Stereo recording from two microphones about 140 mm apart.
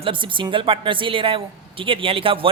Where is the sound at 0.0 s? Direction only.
35° right (ahead or behind).